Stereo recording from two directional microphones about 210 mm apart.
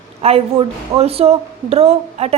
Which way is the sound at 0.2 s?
30° right (ahead or behind).